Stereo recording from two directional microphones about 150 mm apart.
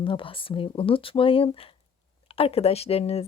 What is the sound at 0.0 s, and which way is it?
Speech, 35° left (ahead or behind).